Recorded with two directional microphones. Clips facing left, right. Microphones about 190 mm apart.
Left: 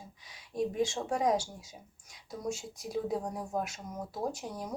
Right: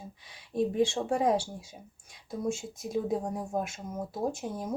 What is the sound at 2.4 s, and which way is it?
Speech, 25° right (ahead or behind).